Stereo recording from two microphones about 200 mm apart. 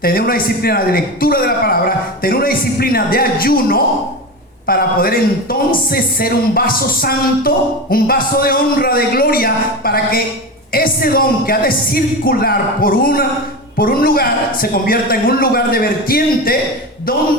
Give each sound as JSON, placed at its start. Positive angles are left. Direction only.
{"t": 0.0, "sound": "speech", "side_deg": 45}